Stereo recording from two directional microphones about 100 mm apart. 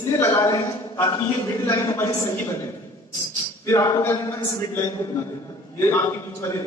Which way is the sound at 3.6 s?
30° left (ahead or behind).